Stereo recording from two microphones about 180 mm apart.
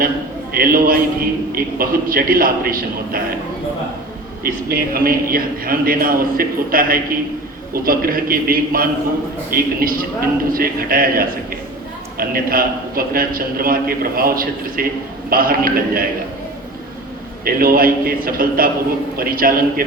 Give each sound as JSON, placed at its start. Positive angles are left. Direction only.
{"t": 0.5, "sound": "a man's voice", "side_deg": -55}
{"t": 4.4, "sound": "a man's voice", "side_deg": -55}
{"t": 17.4, "sound": "a man's voice", "side_deg": -55}